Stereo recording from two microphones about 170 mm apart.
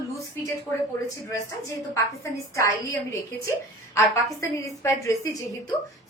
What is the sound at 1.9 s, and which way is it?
A woman's voice, 20° left (ahead or behind).